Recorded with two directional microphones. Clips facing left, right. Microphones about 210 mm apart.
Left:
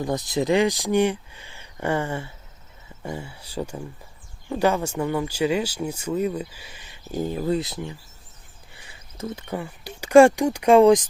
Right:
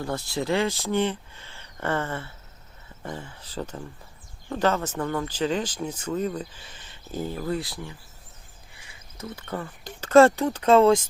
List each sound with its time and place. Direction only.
0.0 s speech: 15° left (ahead or behind)
9.1 s speech: 25° left (ahead or behind)
9.5 s speech: 10° left (ahead or behind)